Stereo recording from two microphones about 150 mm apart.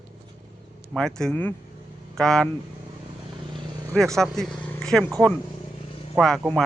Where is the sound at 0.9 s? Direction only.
5° left (ahead or behind).